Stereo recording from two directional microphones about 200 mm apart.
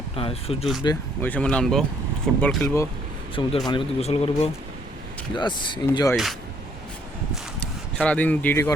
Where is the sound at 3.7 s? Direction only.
25° left (ahead or behind).